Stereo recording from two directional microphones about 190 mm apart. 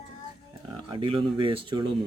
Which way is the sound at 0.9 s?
25° right (ahead or behind).